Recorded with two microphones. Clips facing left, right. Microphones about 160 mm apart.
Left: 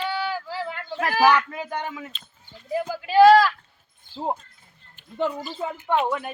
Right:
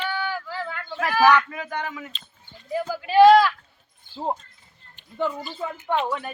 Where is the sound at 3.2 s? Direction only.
5° left (ahead or behind).